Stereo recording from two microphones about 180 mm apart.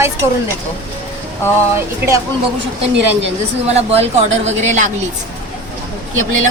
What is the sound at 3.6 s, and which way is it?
Speech, 35° right (ahead or behind).